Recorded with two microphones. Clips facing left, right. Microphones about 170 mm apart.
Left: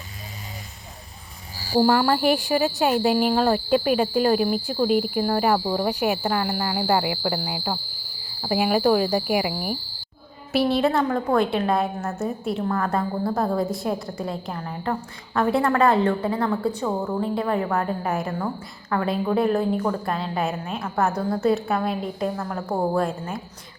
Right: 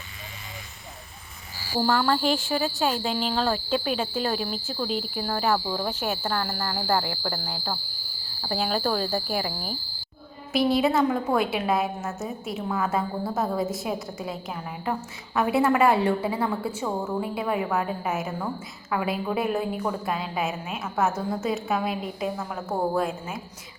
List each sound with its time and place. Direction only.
1.8 s speech: 10° left (ahead or behind)
2.3 s speech: 65° left (ahead or behind)
3.2 s speech: 10° left (ahead or behind)
3.9 s speech: 60° left (ahead or behind)
5.2 s speech: 10° left (ahead or behind)
10.7 s a woman's voice: centre (ahead or behind)
22.7 s speech: 10° left (ahead or behind)
23.0 s a woman's voice: 5° right (ahead or behind)